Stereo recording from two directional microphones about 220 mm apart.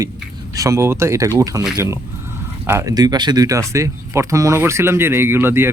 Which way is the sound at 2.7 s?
15° right (ahead or behind).